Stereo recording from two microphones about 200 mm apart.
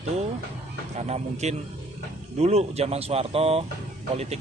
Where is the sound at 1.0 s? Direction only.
35° right (ahead or behind).